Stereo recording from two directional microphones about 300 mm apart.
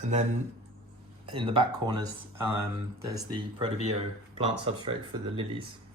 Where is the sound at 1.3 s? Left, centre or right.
Centre.